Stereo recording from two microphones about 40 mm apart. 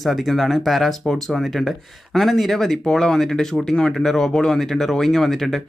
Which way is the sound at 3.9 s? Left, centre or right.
Centre.